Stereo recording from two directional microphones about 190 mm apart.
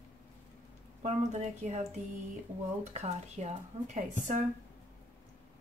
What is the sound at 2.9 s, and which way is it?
Speech, 35° right (ahead or behind).